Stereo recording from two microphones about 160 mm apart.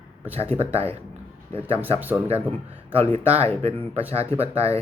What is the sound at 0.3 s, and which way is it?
Speech, 40° right (ahead or behind).